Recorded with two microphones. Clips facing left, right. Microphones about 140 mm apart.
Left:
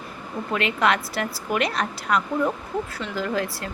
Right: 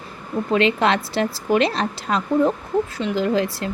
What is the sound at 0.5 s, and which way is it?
Speech, 25° right (ahead or behind).